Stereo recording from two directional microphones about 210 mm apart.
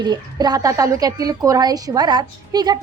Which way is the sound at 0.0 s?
20° right (ahead or behind).